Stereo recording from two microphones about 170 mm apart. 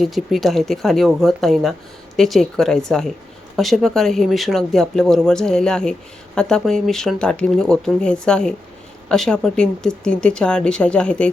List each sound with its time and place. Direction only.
0.0 s speech: centre (ahead or behind)